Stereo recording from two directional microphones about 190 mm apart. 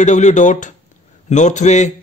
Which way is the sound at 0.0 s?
40° left (ahead or behind).